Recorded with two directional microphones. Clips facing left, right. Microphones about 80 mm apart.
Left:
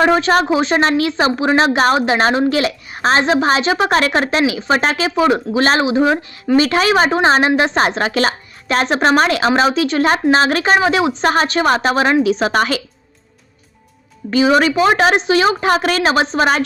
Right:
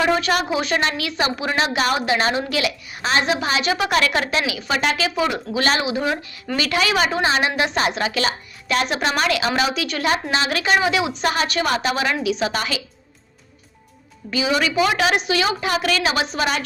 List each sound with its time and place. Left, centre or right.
0.2 s speech: left
14.3 s speech: left